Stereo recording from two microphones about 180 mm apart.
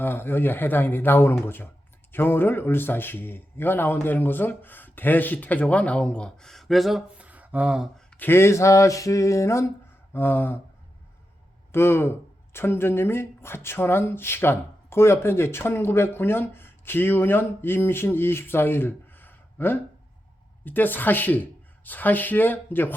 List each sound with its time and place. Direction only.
0.0 s speech: 10° left (ahead or behind); by 8.0 s 5° right (ahead or behind)
8.1 s speech: 10° left (ahead or behind)
11.7 s speech: 15° left (ahead or behind)